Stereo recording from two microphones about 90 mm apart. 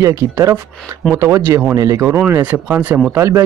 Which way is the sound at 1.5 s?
20° right (ahead or behind).